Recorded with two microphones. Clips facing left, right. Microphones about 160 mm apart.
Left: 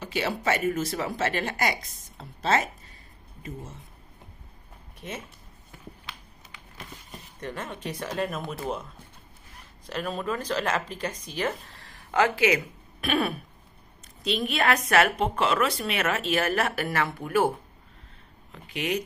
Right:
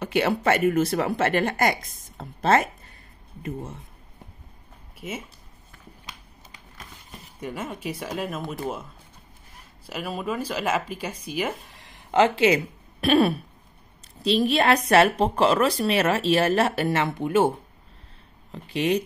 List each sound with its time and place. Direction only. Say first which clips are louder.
0.0 s speech: right 6 dB; 60° right (ahead or behind)
5.0 s speech: right 3 dB; 5° right (ahead or behind)
7.3 s speech: right 3 dB; 10° right (ahead or behind)
9.8 s speech: even; 10° right (ahead or behind)
18.5 s speech: right 6 dB; 30° right (ahead or behind)